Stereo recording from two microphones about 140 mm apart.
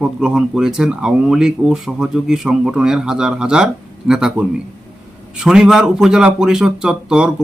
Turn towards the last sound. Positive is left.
turn(degrees=-5)  # may be behind; listen again after turning